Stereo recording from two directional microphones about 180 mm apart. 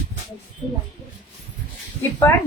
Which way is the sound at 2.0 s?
15° left (ahead or behind).